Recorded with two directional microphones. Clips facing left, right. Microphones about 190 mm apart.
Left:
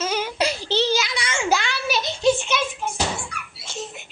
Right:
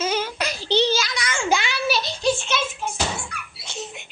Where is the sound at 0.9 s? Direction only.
25° left (ahead or behind).